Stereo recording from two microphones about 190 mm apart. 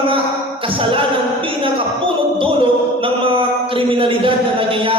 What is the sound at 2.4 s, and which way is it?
Mantra, 25° right (ahead or behind).